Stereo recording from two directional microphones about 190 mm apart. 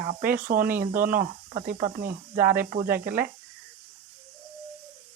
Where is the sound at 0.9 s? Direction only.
10° right (ahead or behind).